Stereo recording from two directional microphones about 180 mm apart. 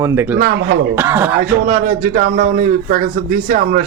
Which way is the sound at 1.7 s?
55° right (ahead or behind).